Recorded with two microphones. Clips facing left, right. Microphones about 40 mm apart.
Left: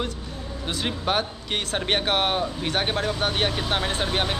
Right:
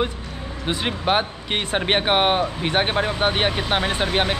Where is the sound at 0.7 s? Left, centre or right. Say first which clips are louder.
Right 4 dB; right.